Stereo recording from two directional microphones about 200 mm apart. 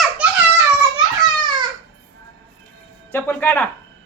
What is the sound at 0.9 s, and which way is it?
Children playing, 20° right (ahead or behind).